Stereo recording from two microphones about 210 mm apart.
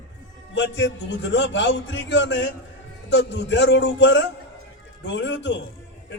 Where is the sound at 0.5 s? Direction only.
60° left (ahead or behind).